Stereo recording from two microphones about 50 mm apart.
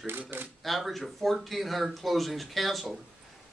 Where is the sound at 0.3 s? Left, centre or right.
Right.